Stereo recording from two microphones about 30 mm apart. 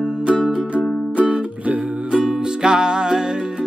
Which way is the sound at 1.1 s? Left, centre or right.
Right.